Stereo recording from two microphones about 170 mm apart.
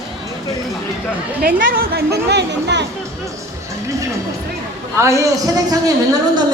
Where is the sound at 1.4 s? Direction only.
60° right (ahead or behind).